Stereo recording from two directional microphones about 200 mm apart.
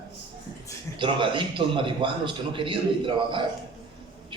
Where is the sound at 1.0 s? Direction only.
25° right (ahead or behind).